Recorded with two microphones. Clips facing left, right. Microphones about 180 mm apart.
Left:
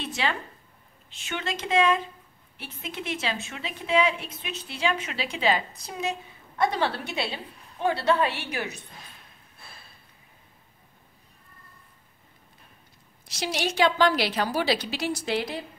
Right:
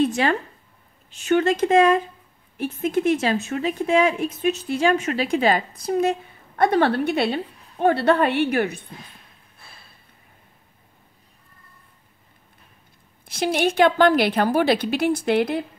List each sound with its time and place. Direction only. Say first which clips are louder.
0.0 s a woman's voice: right 10 dB; 45° right (ahead or behind)
13.3 s a woman's voice: right 8 dB; 55° right (ahead or behind)